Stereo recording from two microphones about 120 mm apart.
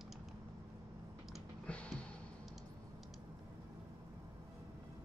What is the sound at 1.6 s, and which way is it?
Music, 10° left (ahead or behind).